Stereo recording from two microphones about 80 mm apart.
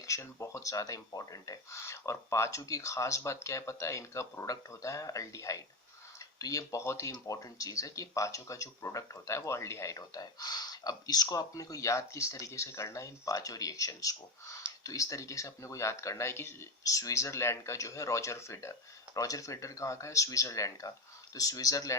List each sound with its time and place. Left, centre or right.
0.0 s speech: left